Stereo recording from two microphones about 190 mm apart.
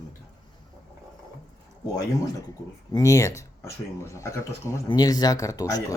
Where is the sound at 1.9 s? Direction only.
20° left (ahead or behind).